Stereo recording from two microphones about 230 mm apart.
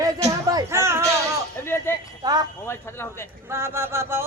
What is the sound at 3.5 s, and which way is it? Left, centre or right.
Speech, centre.